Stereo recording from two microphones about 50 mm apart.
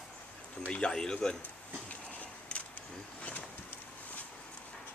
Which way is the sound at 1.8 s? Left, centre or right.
Left.